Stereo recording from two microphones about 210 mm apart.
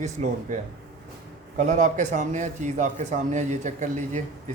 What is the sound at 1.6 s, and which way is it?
A man's voice, 35° right (ahead or behind).